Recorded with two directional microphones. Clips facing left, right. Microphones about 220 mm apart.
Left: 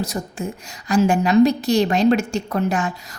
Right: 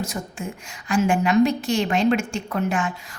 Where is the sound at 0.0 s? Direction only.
40° left (ahead or behind).